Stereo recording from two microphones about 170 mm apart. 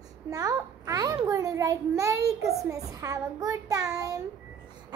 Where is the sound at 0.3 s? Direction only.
20° right (ahead or behind).